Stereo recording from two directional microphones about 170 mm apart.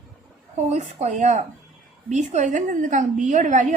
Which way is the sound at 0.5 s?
40° right (ahead or behind).